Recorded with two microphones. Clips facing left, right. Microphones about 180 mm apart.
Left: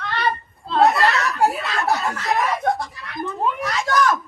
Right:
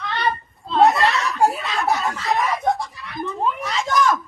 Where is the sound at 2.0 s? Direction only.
Centre (ahead or behind).